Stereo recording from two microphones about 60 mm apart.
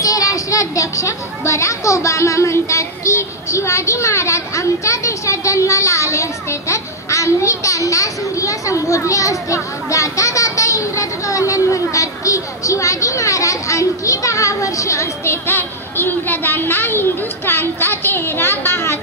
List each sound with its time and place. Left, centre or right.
0.0 s a child's voice: left
15.4 s a child's voice: left